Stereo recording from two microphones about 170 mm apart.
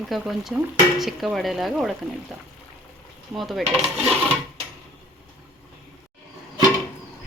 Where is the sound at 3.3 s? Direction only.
Centre (ahead or behind).